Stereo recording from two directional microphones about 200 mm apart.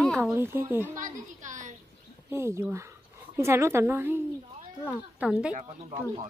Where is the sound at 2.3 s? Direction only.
15° right (ahead or behind).